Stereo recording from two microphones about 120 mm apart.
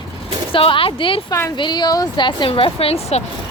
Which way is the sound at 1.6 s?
40° left (ahead or behind).